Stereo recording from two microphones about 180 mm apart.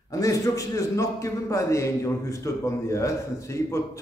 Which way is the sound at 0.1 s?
20° left (ahead or behind).